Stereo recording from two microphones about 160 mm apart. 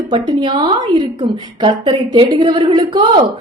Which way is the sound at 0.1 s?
30° right (ahead or behind).